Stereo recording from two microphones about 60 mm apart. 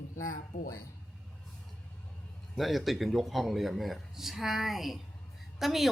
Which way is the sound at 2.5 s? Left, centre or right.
Centre.